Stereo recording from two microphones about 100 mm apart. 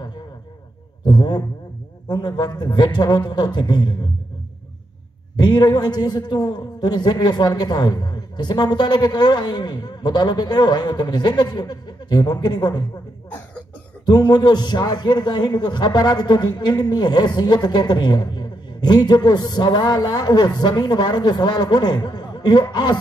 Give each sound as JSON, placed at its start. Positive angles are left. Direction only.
{"t": 1.0, "sound": "a man's voice", "side_deg": 45}
{"t": 5.4, "sound": "a man's voice", "side_deg": 45}
{"t": 14.0, "sound": "a man's voice", "side_deg": 45}